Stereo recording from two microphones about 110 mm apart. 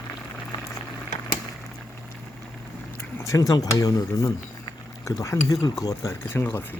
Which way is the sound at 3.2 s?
30° left (ahead or behind).